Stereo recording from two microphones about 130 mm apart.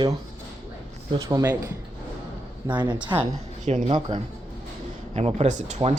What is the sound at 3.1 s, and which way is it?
Speech, 30° right (ahead or behind).